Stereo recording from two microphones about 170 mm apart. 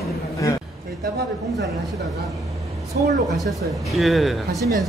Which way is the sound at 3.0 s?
65° right (ahead or behind).